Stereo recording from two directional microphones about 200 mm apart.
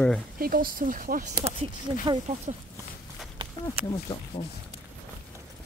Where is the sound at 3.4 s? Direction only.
25° right (ahead or behind).